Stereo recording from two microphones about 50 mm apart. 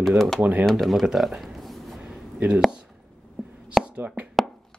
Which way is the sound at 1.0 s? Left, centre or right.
Centre.